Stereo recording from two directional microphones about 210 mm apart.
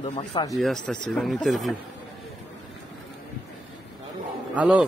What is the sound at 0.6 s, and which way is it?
Speech, centre (ahead or behind).